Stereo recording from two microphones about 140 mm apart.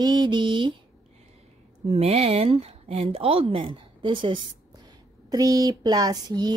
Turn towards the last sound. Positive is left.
turn(degrees=-30)  # may be behind; listen again after turning